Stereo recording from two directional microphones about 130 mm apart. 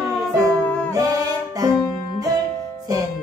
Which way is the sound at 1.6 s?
30° right (ahead or behind).